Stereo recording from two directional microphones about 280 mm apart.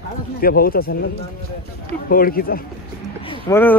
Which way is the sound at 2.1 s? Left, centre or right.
Left.